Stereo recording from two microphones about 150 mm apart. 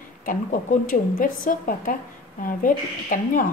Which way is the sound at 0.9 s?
65° left (ahead or behind).